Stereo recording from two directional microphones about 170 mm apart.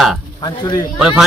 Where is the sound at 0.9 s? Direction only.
5° right (ahead or behind).